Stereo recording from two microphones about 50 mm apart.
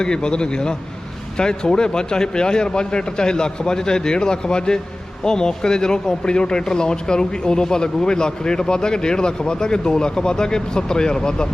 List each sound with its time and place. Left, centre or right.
0.0 s speech: centre